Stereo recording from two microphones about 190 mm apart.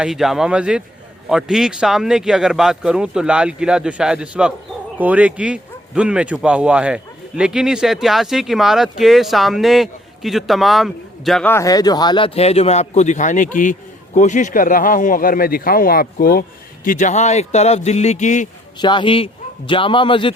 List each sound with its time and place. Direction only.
0.0 s speech: centre (ahead or behind)
11.5 s a man's voice: 20° left (ahead or behind); by 18.4 s 40° left (ahead or behind)
18.8 s a man's voice: 25° left (ahead or behind)